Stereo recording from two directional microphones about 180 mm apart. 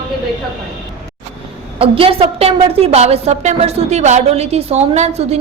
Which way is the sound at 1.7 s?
30° right (ahead or behind).